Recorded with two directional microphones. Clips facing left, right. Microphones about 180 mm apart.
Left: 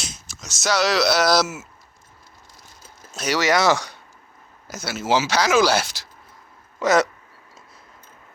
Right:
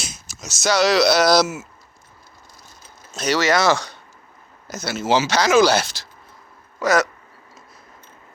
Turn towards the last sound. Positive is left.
turn(degrees=25)  # may be behind; listen again after turning